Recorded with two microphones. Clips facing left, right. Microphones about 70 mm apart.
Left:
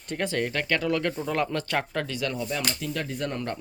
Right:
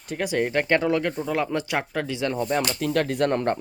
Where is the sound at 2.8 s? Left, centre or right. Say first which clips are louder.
Right 8 dB; right.